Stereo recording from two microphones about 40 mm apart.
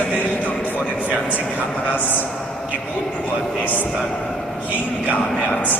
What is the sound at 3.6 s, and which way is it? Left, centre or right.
Speech, left.